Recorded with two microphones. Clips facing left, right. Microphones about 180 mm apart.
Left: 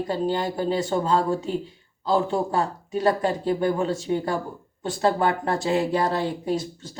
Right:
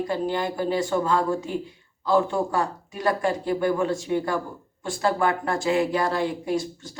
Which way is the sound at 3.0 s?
20° left (ahead or behind).